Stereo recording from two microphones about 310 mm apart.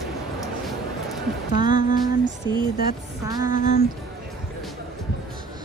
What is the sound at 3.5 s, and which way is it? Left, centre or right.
Music, left.